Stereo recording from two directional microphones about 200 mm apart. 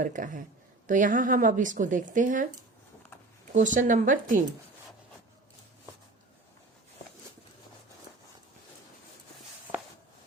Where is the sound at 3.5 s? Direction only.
40° right (ahead or behind).